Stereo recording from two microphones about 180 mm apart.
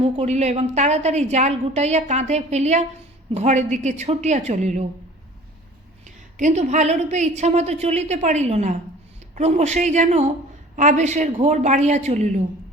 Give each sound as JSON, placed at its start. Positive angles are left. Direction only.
{"t": 0.0, "sound": "a woman's voice", "side_deg": -35}
{"t": 6.1, "sound": "a woman's voice", "side_deg": -45}